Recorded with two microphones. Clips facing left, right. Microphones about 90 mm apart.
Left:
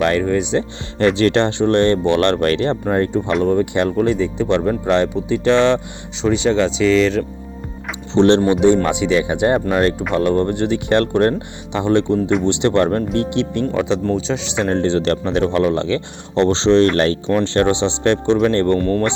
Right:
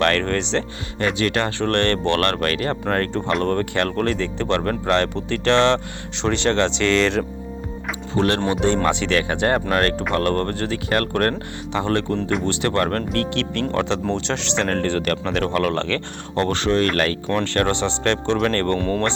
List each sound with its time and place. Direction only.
0.0 s speech: 15° left (ahead or behind)
0.9 s speech: 30° left (ahead or behind)
2.9 s speech: 15° left (ahead or behind)
8.1 s speech: 25° left (ahead or behind)
8.8 s speech: 10° left (ahead or behind)
18.8 s speech: 5° left (ahead or behind)